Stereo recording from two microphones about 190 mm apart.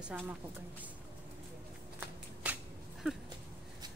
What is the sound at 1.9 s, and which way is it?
Shuffling cards, 10° right (ahead or behind).